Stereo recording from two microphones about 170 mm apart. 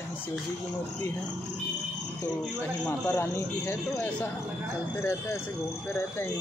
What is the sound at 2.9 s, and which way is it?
Speech, 15° left (ahead or behind).